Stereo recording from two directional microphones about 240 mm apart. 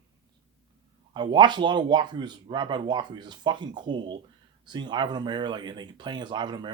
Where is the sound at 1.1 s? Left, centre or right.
Centre.